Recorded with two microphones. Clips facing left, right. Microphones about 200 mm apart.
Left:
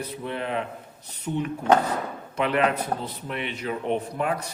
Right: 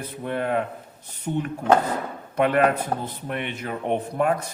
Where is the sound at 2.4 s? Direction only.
50° right (ahead or behind).